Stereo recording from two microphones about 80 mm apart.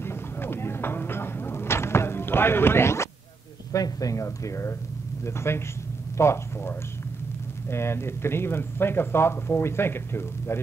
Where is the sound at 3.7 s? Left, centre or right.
Left.